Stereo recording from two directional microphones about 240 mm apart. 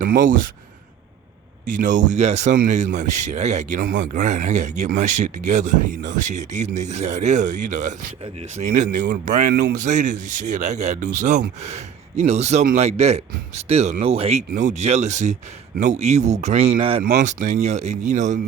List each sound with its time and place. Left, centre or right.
0.0 s speech: right
1.6 s speech: right
17.0 s speech: right